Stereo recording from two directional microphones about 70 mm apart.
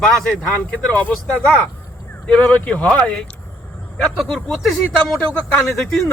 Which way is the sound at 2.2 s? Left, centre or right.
Centre.